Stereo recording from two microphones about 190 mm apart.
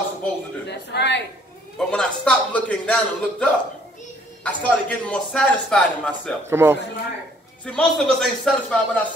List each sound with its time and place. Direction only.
0.7 s speech: 65° left (ahead or behind)
1.8 s a man's voice: 5° left (ahead or behind)
6.4 s a man's voice: 10° right (ahead or behind)
7.6 s a man's voice: 5° left (ahead or behind)